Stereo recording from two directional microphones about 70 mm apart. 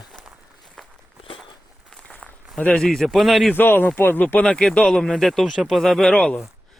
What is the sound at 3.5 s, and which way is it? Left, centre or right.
Speech, left.